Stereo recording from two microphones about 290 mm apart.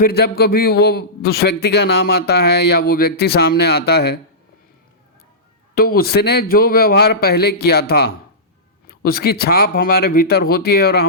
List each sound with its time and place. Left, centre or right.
0.0 s a man's voice: left
5.7 s a man's voice: left